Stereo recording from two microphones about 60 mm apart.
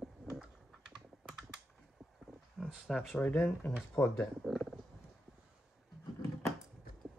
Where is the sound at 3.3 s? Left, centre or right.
Left.